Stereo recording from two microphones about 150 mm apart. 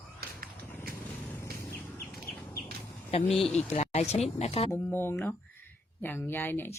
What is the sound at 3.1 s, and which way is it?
Speech, 40° left (ahead or behind).